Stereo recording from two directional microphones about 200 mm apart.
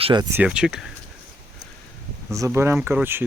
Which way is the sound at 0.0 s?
25° right (ahead or behind).